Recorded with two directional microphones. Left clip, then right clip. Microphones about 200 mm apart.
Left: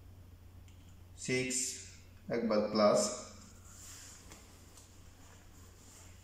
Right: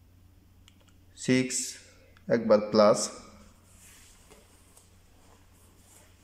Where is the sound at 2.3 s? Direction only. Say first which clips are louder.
Right 9 dB; 50° right (ahead or behind).